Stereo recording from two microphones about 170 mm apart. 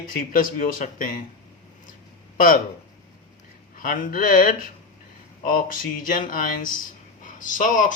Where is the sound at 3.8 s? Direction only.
55° left (ahead or behind).